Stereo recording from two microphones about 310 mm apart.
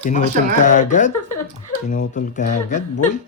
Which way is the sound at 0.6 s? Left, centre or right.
Left.